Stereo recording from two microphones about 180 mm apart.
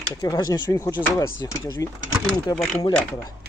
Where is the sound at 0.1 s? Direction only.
25° left (ahead or behind).